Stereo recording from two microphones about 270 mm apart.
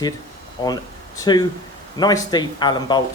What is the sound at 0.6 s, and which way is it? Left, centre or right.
Speech, centre.